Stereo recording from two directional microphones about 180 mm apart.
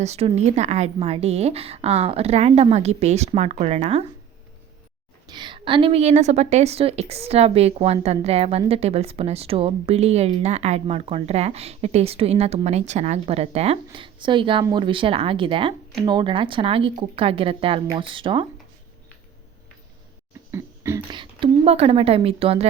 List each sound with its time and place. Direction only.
0.0 s a woman's voice: 35° right (ahead or behind)
5.3 s a woman's voice: 25° right (ahead or behind)
20.5 s speech: 15° right (ahead or behind)
21.2 s a woman's voice: 30° right (ahead or behind)